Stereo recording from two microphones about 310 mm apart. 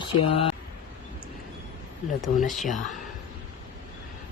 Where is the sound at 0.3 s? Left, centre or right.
Centre.